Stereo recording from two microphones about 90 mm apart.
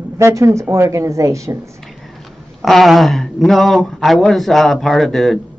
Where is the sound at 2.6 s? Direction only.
Centre (ahead or behind).